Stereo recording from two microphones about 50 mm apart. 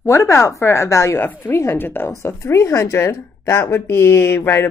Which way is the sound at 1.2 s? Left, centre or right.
Left.